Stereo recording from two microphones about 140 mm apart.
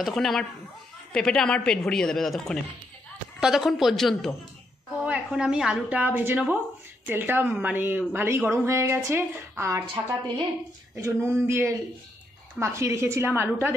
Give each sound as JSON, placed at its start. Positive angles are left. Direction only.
{"t": 0.0, "sound": "a woman's voice", "side_deg": 0}
{"t": 11.0, "sound": "a woman's voice", "side_deg": -20}